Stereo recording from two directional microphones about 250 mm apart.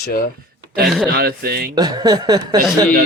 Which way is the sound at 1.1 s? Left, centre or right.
Right.